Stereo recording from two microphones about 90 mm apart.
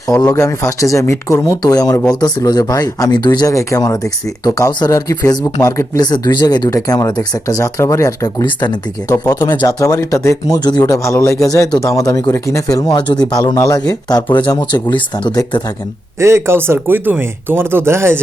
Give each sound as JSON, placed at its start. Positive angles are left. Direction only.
{"t": 0.3, "sound": "speech", "side_deg": 35}
{"t": 3.4, "sound": "speech", "side_deg": 35}
{"t": 6.0, "sound": "speech", "side_deg": 50}
{"t": 9.4, "sound": "speech", "side_deg": 55}
{"t": 9.6, "sound": "speech", "side_deg": 40}
{"t": 10.6, "sound": "speech", "side_deg": 50}
{"t": 10.9, "sound": "speech", "side_deg": 35}
{"t": 14.3, "sound": "speech", "side_deg": 65}
{"t": 16.2, "sound": "speech", "side_deg": -30}